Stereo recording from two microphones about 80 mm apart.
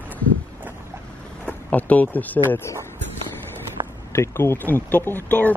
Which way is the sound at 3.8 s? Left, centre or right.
Right.